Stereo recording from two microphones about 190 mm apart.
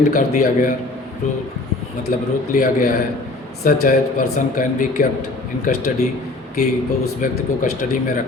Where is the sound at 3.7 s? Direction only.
45° left (ahead or behind).